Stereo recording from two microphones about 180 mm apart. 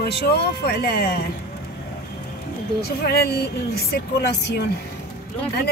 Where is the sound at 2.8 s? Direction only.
60° left (ahead or behind).